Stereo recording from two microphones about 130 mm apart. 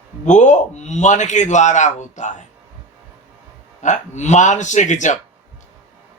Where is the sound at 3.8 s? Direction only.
65° left (ahead or behind).